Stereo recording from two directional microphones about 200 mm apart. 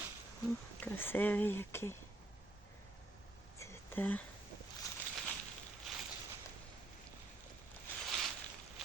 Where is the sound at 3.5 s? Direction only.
10° left (ahead or behind).